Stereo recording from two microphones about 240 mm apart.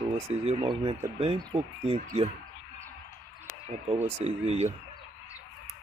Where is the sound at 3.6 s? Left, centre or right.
Right.